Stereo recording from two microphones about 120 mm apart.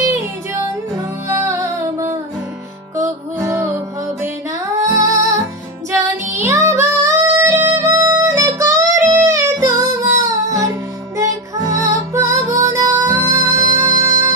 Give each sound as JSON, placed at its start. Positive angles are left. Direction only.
{"t": 0.0, "sound": "music", "side_deg": -25}
{"t": 3.4, "sound": "music", "side_deg": -25}